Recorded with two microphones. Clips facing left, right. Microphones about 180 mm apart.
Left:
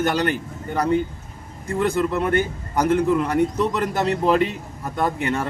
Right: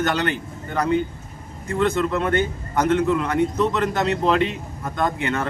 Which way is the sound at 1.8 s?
10° left (ahead or behind).